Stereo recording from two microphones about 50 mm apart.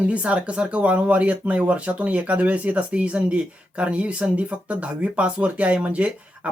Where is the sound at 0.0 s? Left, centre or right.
Right.